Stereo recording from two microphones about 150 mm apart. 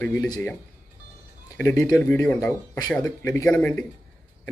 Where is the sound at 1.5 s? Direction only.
20° left (ahead or behind).